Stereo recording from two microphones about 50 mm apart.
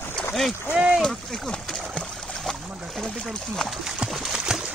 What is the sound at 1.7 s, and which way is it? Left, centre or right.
Splash, centre.